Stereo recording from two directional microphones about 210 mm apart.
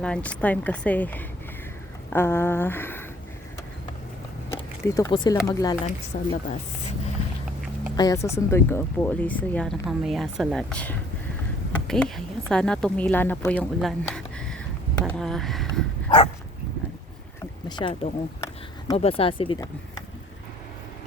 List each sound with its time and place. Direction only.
0.0 s speech: 5° left (ahead or behind)
4.8 s speech: 15° left (ahead or behind)
6.1 s a woman's voice: 35° left (ahead or behind)
7.9 s a woman's voice: 15° left (ahead or behind)
15.0 s a sound: 5° left (ahead or behind)
16.0 s dog: 25° left (ahead or behind)
17.7 s a sound: 20° left (ahead or behind)
18.9 s speech: 30° left (ahead or behind)